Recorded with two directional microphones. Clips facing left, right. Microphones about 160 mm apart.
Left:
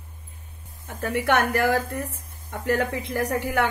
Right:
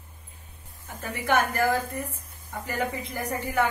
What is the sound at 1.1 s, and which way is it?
A woman's voice, 70° left (ahead or behind).